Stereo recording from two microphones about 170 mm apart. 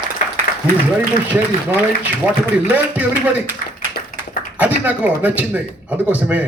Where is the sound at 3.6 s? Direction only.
55° left (ahead or behind).